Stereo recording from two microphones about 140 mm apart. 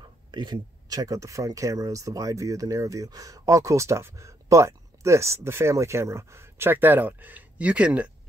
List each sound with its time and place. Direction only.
0.3 s speech: 30° right (ahead or behind); by 8.1 s 10° right (ahead or behind)